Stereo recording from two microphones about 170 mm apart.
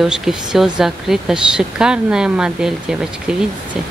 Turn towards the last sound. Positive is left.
turn(degrees=-5)  # may be behind; listen again after turning